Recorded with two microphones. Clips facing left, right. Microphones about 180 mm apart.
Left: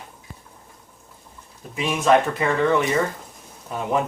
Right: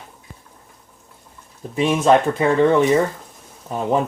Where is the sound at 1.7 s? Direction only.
30° right (ahead or behind).